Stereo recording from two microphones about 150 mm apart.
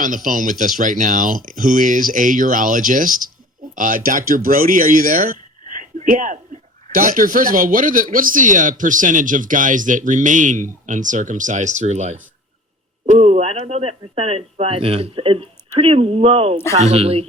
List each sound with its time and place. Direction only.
0.0 s speech: 60° right (ahead or behind); by 17.2 s 40° right (ahead or behind)